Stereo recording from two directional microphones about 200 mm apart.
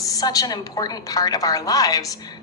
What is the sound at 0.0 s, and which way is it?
A woman's voice, 15° left (ahead or behind).